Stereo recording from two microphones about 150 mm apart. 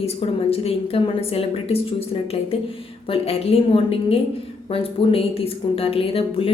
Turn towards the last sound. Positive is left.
turn(degrees=40)  # may be behind; listen again after turning